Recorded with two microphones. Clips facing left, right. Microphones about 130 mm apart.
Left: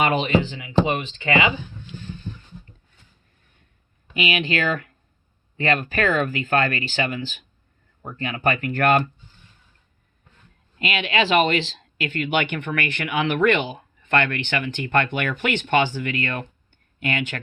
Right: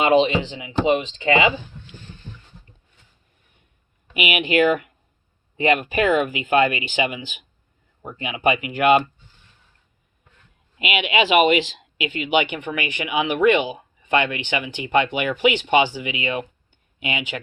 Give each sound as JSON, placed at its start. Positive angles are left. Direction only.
{"t": 0.0, "sound": "speech", "side_deg": -25}
{"t": 4.1, "sound": "speech", "side_deg": -15}
{"t": 10.8, "sound": "speech", "side_deg": -10}